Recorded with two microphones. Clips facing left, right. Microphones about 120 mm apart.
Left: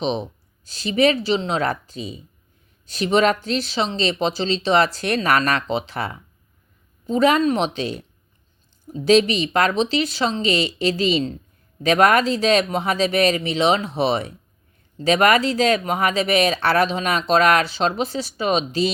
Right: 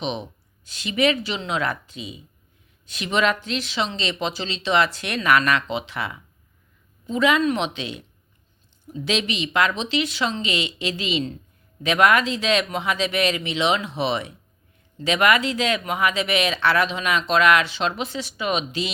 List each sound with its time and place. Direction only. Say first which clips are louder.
0.0 s speech: left 5 dB; 35° left (ahead or behind)